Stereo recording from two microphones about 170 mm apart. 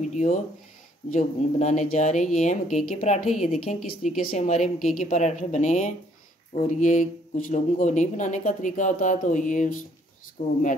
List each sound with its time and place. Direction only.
0.1 s speech: 45° left (ahead or behind)
3.3 s a woman's voice: centre (ahead or behind)
3.5 s speech: 50° left (ahead or behind)
4.4 s a woman's voice: 40° left (ahead or behind)